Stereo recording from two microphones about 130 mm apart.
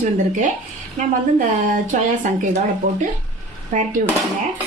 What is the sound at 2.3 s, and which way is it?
Speech, 80° right.